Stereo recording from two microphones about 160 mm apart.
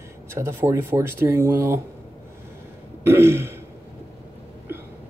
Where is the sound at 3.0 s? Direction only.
15° right (ahead or behind).